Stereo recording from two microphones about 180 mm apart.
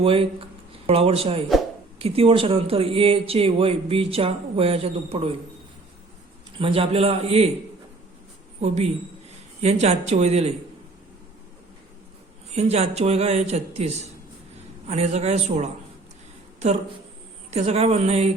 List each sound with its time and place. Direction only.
0.0 s speech: 30° right (ahead or behind)
6.6 s speech: 30° right (ahead or behind)
8.6 s speech: 35° right (ahead or behind)
12.5 s speech: 35° right (ahead or behind)
17.5 s speech: 35° right (ahead or behind)